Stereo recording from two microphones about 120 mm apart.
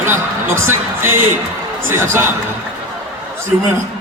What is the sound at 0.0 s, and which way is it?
Speech, 20° right (ahead or behind).